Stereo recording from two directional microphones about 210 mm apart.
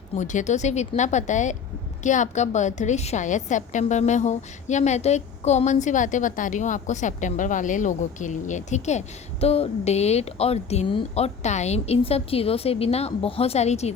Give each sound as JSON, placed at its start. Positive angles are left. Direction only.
{"t": 0.2, "sound": "a woman's voice", "side_deg": 35}